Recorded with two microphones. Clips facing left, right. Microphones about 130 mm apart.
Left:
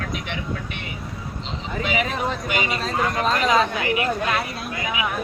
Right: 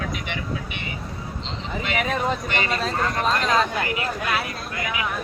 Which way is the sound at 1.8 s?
Centre (ahead or behind).